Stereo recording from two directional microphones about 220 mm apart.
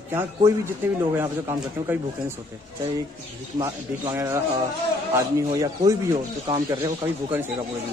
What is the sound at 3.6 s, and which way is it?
Speech, 15° right (ahead or behind).